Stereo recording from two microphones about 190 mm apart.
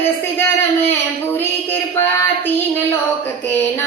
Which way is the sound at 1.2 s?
10° left (ahead or behind).